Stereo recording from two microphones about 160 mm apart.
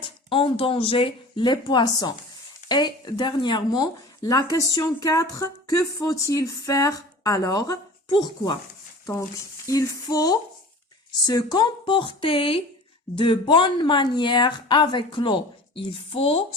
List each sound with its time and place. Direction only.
0.3 s speech: 35° left (ahead or behind)